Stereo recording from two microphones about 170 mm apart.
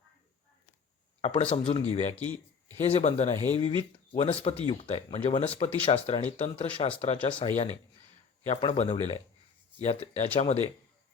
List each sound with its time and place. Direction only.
1.2 s speech: 35° left (ahead or behind)